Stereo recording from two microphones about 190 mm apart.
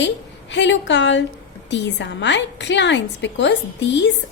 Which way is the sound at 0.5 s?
70° left (ahead or behind).